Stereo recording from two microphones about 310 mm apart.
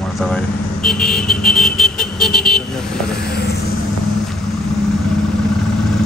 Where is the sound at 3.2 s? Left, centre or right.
Left.